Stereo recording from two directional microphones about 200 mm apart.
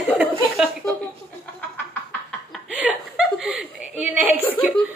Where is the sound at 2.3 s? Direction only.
5° right (ahead or behind).